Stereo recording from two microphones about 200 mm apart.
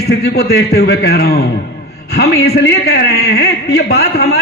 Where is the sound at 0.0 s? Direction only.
55° left (ahead or behind).